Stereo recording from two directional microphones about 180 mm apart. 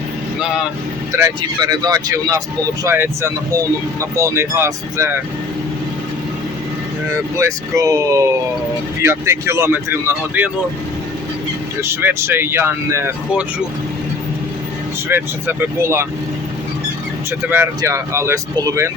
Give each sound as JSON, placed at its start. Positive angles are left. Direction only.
{"t": 0.3, "sound": "vehicle", "side_deg": -5}
{"t": 1.1, "sound": "speech", "side_deg": -20}
{"t": 7.3, "sound": "speech", "side_deg": -15}
{"t": 11.8, "sound": "speech", "side_deg": -10}
{"t": 15.1, "sound": "speech", "side_deg": -10}
{"t": 17.5, "sound": "speech", "side_deg": -15}